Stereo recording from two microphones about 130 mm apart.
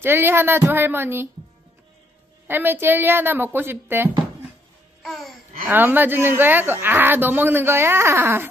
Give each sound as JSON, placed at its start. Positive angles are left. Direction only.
{"t": 0.0, "sound": "speech", "side_deg": -15}
{"t": 2.4, "sound": "speech", "side_deg": -15}
{"t": 5.0, "sound": "babbling", "side_deg": 0}
{"t": 5.7, "sound": "speech", "side_deg": -15}